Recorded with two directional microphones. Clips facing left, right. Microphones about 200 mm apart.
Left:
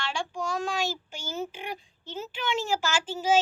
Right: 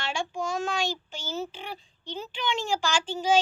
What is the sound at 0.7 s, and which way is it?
A child's voice, 5° left (ahead or behind).